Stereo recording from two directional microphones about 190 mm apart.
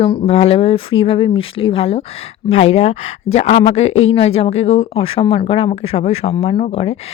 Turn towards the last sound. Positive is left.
turn(degrees=30)  # may be behind; listen again after turning